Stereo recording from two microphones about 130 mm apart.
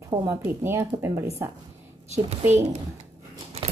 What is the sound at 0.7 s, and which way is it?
Speech, 20° right (ahead or behind).